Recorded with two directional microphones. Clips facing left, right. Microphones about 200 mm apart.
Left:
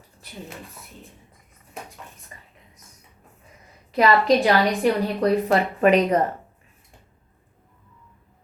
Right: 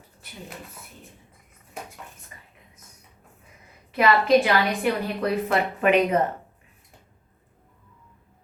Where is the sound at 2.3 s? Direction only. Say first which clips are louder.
Left 2 dB; 35° left (ahead or behind).